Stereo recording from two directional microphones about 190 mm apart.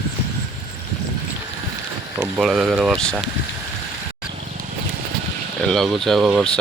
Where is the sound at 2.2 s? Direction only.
Centre (ahead or behind).